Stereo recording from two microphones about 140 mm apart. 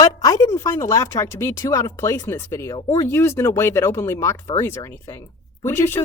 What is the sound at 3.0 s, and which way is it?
Speech, 20° left (ahead or behind).